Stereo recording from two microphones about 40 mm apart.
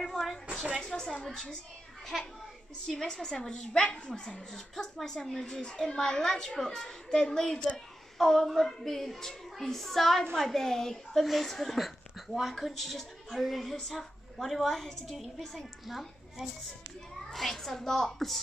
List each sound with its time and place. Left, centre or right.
0.0 s a sound: centre
0.8 s a woman's voice: centre
2.1 s a woman's voice: centre
2.9 s a woman's voice: centre
5.6 s a woman's voice: left
8.2 s a woman's voice: centre